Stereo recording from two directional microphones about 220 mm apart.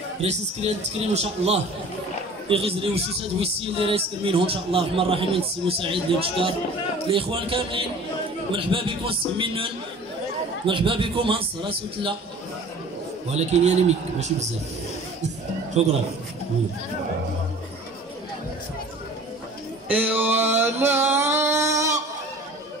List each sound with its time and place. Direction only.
0.2 s a man's voice: 30° right (ahead or behind)
13.3 s a man's voice: 30° right (ahead or behind)
15.8 s a man's voice: 30° right (ahead or behind)
19.9 s a sound: 10° right (ahead or behind)